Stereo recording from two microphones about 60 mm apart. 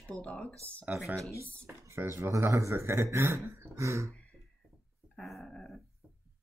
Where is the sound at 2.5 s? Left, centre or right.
Right.